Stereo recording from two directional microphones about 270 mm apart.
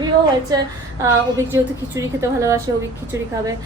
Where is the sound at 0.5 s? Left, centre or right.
Centre.